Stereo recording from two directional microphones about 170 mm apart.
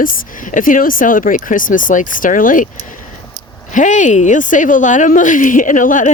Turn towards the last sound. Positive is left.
turn(degrees=50)  # may be behind; listen again after turning